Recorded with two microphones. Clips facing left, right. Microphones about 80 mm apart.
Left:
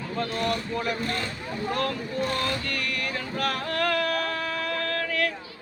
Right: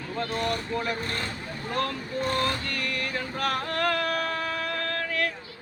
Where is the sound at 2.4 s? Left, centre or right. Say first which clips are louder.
Even; right.